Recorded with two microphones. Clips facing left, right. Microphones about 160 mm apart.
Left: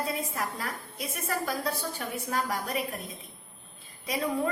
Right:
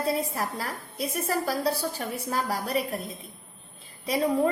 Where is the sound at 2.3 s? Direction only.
35° right (ahead or behind).